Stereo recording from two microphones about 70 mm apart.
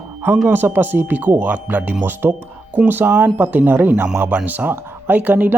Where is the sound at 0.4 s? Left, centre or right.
Right.